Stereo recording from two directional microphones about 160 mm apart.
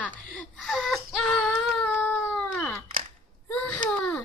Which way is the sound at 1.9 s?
10° left (ahead or behind).